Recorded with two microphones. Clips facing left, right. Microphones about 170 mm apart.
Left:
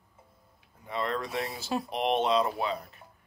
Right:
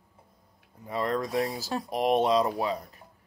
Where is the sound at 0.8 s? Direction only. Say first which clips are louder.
Right 3 dB; 35° right (ahead or behind).